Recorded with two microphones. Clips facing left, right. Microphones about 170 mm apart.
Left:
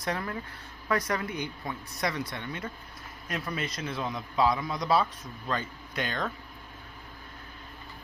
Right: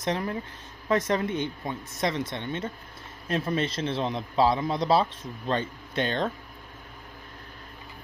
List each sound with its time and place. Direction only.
0.0 s speech: 20° right (ahead or behind)